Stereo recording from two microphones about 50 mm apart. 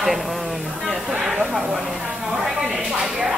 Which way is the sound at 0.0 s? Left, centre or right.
Centre.